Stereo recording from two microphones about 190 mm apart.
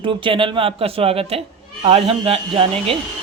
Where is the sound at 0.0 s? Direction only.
25° right (ahead or behind).